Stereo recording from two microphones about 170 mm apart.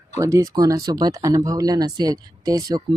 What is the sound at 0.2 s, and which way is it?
Speech, 20° right (ahead or behind).